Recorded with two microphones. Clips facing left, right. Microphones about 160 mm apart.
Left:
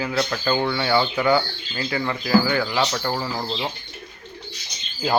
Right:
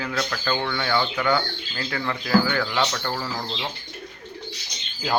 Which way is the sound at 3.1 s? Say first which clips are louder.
Left 3 dB; 25° left (ahead or behind).